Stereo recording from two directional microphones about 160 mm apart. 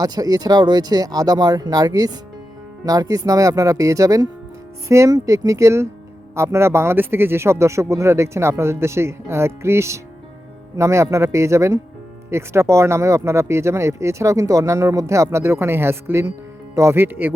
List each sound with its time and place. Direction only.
0.0 s speech: 25° right (ahead or behind)